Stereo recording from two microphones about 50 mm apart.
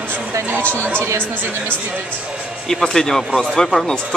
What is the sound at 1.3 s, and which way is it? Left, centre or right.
Speech, right.